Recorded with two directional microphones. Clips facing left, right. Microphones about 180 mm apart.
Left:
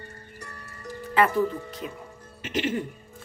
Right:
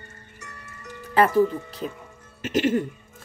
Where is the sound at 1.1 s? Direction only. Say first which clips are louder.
Right 4 dB; 35° right (ahead or behind).